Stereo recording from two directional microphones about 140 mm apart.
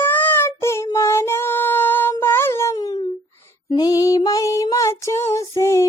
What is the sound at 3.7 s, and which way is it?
Female singing, 30° left (ahead or behind).